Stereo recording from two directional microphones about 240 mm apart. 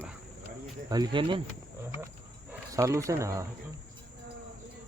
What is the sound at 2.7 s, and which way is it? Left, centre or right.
Speech, centre.